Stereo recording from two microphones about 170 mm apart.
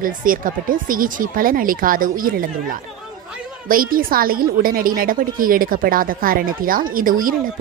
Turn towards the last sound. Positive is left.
turn(degrees=-55)  # may be behind; listen again after turning